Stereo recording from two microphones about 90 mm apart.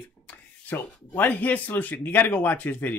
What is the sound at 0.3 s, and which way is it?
Speech, 20° left (ahead or behind).